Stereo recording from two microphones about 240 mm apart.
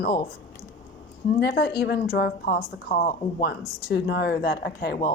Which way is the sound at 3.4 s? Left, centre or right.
Left.